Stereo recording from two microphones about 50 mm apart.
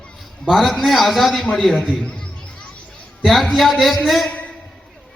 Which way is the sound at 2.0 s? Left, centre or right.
Left.